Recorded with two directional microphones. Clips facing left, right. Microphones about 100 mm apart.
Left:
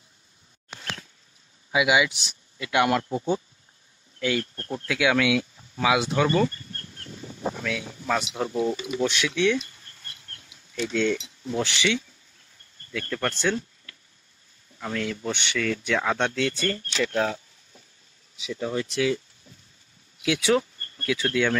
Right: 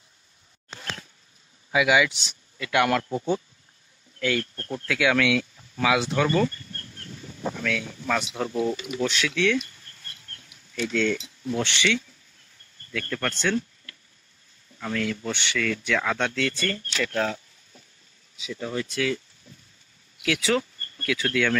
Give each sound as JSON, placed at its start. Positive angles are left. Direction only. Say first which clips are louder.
{"t": 1.7, "sound": "speech", "louder": "right 1 dB", "side_deg": 20}
{"t": 12.9, "sound": "speech", "louder": "left 1 dB", "side_deg": 25}
{"t": 13.4, "sound": "a sound", "louder": "even", "side_deg": 25}
{"t": 14.8, "sound": "speech", "louder": "right 1 dB", "side_deg": 25}
{"t": 18.5, "sound": "speech", "louder": "left 2 dB", "side_deg": 20}